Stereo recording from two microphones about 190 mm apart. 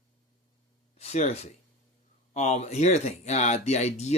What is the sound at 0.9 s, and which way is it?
Speech, 35° left (ahead or behind).